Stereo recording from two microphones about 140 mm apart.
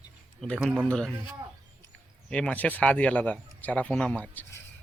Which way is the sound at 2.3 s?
10° left (ahead or behind).